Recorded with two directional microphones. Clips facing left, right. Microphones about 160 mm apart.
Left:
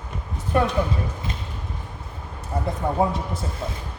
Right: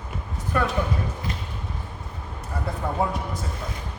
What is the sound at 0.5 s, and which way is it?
Speech, 25° left (ahead or behind).